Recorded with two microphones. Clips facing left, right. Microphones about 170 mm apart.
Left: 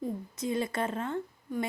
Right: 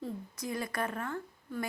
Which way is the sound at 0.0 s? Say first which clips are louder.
Left 5 dB; 25° left (ahead or behind).